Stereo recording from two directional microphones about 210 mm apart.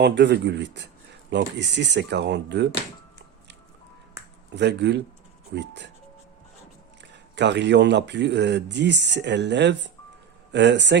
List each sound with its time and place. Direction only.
0.0 s speech: 55° right (ahead or behind)
4.5 s speech: 55° right (ahead or behind)
7.0 s speech: 55° right (ahead or behind)